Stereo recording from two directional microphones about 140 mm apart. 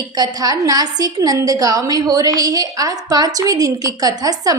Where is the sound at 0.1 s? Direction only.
25° right (ahead or behind).